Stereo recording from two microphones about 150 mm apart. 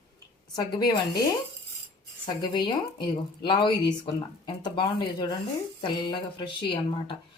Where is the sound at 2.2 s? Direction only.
30° left (ahead or behind).